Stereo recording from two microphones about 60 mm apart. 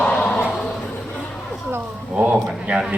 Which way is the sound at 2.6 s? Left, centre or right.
Centre.